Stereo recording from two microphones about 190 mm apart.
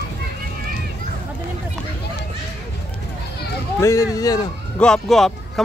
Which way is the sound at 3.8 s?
15° left (ahead or behind).